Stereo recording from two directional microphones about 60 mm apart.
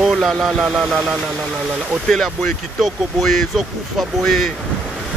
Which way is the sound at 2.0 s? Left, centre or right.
Centre.